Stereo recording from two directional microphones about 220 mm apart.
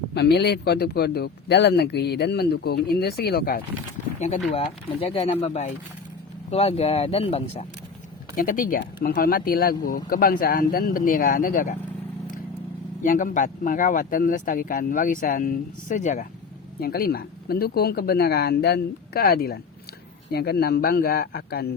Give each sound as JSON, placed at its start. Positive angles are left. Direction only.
{"t": 0.1, "sound": "speech", "side_deg": 50}
{"t": 4.2, "sound": "speech", "side_deg": 30}
{"t": 8.4, "sound": "speech", "side_deg": 40}
{"t": 13.0, "sound": "speech", "side_deg": 35}